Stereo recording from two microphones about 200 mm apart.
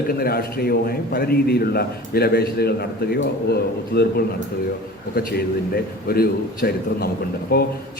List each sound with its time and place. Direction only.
0.2 s a man's voice: 50° left (ahead or behind)
5.1 s a man's voice: 50° left (ahead or behind)